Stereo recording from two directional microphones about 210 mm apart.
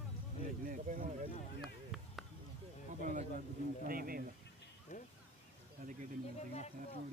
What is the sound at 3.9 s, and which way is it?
Speech, 45° right (ahead or behind).